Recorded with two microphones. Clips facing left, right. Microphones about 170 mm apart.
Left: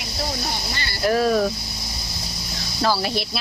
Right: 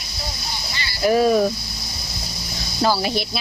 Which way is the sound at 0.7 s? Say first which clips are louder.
Left 2 dB; 50° left (ahead or behind).